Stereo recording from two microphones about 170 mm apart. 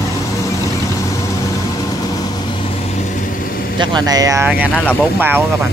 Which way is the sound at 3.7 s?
25° right (ahead or behind).